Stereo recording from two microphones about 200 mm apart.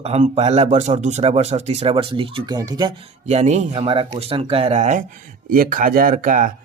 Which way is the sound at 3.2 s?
35° right (ahead or behind).